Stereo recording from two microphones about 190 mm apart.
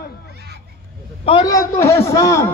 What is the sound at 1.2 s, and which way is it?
A man's voice, 20° left (ahead or behind).